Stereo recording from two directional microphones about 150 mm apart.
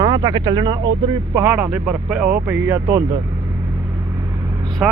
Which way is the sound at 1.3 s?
15° right (ahead or behind).